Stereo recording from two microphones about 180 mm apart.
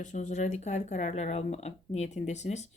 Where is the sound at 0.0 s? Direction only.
40° left (ahead or behind).